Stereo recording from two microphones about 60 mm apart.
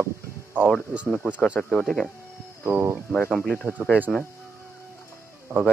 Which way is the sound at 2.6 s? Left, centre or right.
Right.